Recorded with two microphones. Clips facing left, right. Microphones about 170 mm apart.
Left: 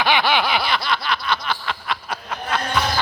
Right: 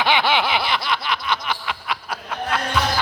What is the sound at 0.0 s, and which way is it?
Snicker, 20° right (ahead or behind).